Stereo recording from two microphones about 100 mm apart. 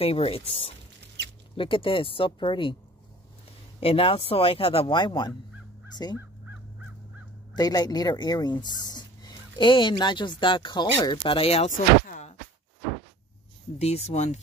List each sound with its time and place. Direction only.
0.0 s speech: 75° left (ahead or behind)
1.6 s speech: 60° left (ahead or behind)
3.8 s speech: 65° left (ahead or behind)
4.9 s speech: 50° left (ahead or behind)
7.5 s speech: 40° left (ahead or behind); by 11.7 s 90° left
13.7 s speech: 90° left